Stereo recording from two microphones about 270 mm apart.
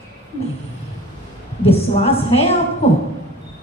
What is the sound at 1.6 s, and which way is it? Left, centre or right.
Speech, left.